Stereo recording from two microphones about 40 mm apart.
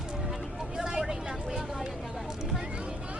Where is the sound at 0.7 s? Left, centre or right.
Centre.